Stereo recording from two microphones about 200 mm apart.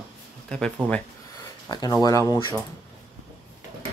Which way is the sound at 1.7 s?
20° left (ahead or behind).